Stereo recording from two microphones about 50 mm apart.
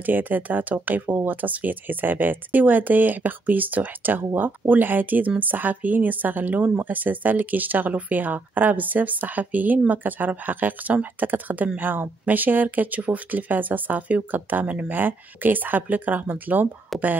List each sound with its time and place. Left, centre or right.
0.0 s a woman's voice: right
14.9 s a woman's voice: right
16.9 s speech: centre